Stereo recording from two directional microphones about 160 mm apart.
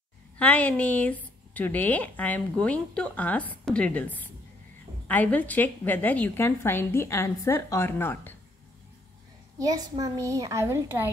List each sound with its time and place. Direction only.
0.4 s a woman's voice: 10° left (ahead or behind)
9.6 s a child's voice: 25° right (ahead or behind)